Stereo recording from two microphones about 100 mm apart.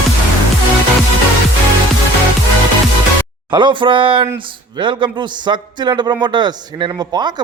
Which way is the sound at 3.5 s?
50° right (ahead or behind).